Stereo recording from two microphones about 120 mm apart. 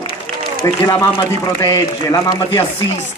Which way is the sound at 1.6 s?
30° left (ahead or behind).